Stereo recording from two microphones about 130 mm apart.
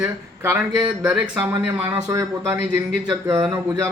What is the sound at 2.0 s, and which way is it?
Mantra, 20° right (ahead or behind).